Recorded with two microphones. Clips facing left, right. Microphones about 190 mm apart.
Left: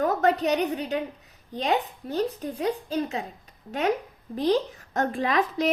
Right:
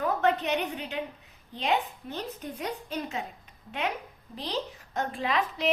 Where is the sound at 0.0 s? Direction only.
40° left (ahead or behind).